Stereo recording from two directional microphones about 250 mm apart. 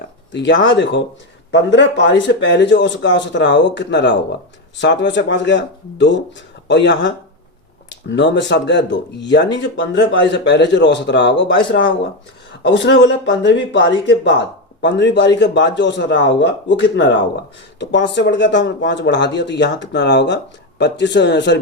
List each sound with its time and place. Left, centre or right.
0.3 s speech: left